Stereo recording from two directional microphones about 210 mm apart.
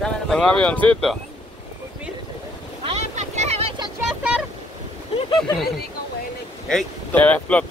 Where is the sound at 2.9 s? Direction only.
30° right (ahead or behind).